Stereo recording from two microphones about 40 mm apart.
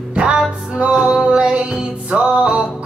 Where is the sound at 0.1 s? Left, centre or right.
Right.